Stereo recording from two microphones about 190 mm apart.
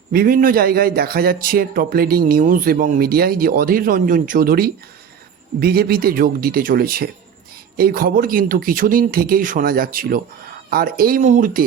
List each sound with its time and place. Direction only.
0.1 s a man's voice: 50° right (ahead or behind)